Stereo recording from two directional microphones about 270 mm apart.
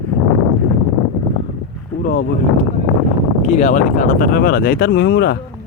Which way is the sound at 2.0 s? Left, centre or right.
Left.